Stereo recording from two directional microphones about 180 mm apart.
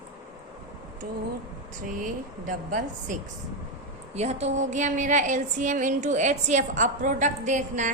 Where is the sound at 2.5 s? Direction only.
45° right (ahead or behind).